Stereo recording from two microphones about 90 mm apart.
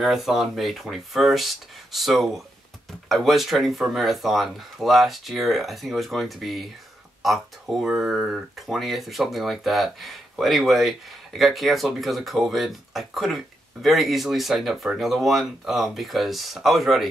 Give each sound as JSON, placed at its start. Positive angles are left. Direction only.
{"t": 0.0, "sound": "speech", "side_deg": 0}